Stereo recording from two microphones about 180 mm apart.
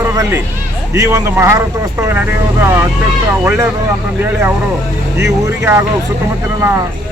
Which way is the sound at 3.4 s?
15° right (ahead or behind).